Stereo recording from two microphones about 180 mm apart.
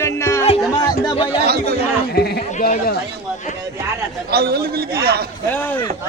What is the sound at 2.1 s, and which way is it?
Sheep, 60° left (ahead or behind).